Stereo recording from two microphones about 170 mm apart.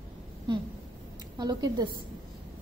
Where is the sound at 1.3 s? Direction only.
25° right (ahead or behind).